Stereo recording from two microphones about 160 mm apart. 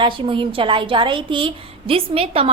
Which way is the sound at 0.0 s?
30° right (ahead or behind).